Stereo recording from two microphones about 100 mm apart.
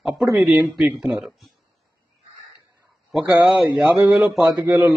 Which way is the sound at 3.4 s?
10° right (ahead or behind).